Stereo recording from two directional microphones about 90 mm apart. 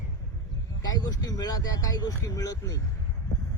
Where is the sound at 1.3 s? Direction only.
45° left (ahead or behind).